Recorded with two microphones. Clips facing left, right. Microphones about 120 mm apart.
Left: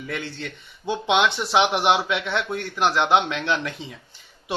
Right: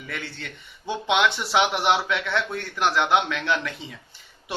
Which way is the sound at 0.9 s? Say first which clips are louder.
Left 2 dB; 20° left (ahead or behind).